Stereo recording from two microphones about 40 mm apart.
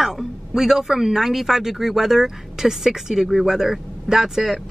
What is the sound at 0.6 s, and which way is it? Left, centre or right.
Speech, centre.